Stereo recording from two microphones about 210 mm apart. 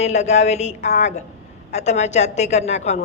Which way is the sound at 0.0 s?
35° left (ahead or behind).